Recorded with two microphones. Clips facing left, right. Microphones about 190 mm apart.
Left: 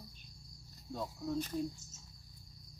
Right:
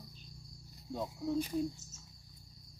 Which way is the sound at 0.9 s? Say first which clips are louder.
Right 3 dB; 15° right (ahead or behind).